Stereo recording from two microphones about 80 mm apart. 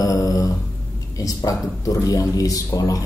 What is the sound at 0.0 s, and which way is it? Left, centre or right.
Mantra, left.